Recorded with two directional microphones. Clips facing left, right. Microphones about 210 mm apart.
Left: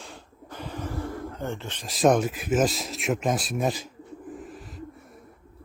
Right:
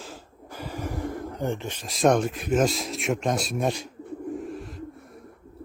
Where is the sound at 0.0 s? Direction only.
5° right (ahead or behind).